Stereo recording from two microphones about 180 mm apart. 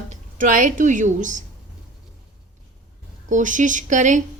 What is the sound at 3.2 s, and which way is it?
Speech, 45° right (ahead or behind).